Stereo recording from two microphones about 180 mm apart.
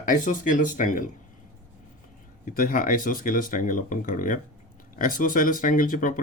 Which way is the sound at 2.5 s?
50° left (ahead or behind).